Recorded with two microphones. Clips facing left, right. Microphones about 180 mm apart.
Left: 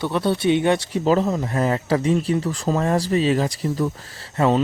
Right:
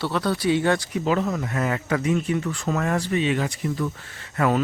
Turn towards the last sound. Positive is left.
turn(degrees=25)  # may be behind; listen again after turning